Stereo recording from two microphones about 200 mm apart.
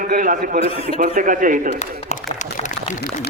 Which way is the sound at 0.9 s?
40° right (ahead or behind).